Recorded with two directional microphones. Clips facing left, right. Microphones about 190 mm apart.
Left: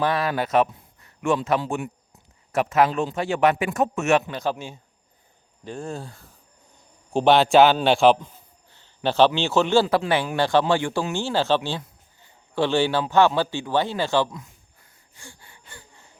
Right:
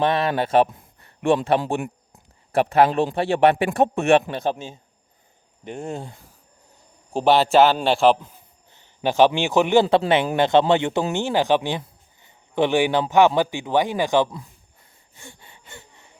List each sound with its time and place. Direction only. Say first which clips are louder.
0.0 s speech: right 2 dB; 25° right (ahead or behind)
1.0 s a sound: right 3 dB; 35° right (ahead or behind)
1.6 s a sound: right 3 dB; 50° right (ahead or behind)
2.5 s speech: right 3 dB; 35° right (ahead or behind)
7.1 s a man's voice: even; 5° right (ahead or behind)
8.7 s a man's voice: right 1 dB; 15° right (ahead or behind)
9.8 s speech: right 4 dB; 30° right (ahead or behind)
15.2 s gasp: right 2 dB; 20° right (ahead or behind)